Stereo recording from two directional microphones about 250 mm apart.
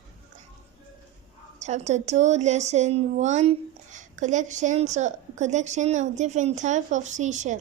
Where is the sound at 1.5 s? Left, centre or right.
Right.